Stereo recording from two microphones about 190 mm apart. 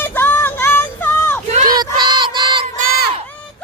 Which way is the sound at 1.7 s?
20° right (ahead or behind).